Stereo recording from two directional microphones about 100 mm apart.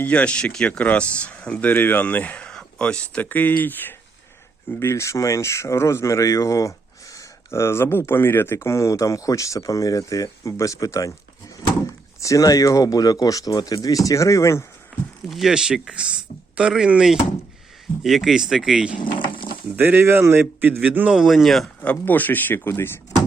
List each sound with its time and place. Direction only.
0.0 s speech: 15° left (ahead or behind); by 11.1 s 35° left (ahead or behind)
12.2 s speech: 35° left (ahead or behind)
15.3 s speech: centre (ahead or behind)
18.9 s a sound: 50° left (ahead or behind)
19.7 s a man's voice: 20° right (ahead or behind)
21.2 s speech: centre (ahead or behind)
21.8 s speech: 15° left (ahead or behind)